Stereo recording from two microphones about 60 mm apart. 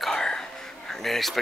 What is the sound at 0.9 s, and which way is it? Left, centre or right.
Speech, centre.